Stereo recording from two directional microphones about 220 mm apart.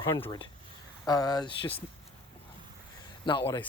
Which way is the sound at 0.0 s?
15° left (ahead or behind).